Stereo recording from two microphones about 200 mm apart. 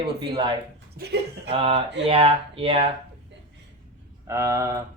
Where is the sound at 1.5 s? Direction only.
30° right (ahead or behind).